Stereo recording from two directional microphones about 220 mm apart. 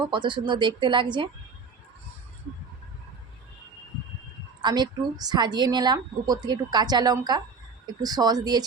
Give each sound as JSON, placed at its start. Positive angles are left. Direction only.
{"t": 0.0, "sound": "a woman's voice", "side_deg": -20}
{"t": 4.6, "sound": "a woman's voice", "side_deg": -20}